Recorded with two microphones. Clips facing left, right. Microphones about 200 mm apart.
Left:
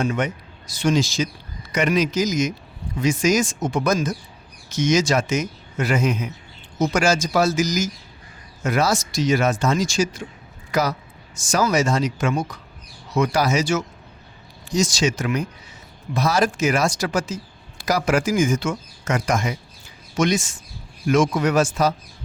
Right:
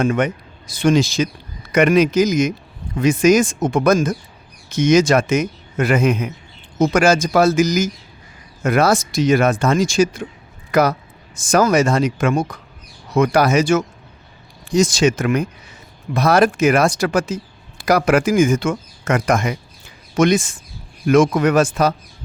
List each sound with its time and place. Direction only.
0.0 s speech: 55° right (ahead or behind)